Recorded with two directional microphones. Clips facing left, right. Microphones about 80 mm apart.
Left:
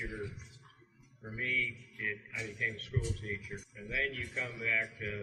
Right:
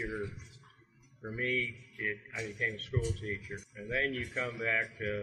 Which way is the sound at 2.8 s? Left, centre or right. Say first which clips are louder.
Right 3 dB; right.